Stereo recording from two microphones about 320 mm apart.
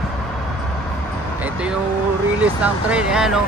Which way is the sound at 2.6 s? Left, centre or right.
Centre.